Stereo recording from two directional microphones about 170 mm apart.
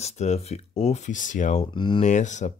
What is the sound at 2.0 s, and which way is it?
Speech, 45° left (ahead or behind).